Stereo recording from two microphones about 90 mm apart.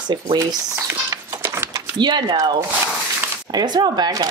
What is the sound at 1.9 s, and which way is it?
Speech, 55° right (ahead or behind).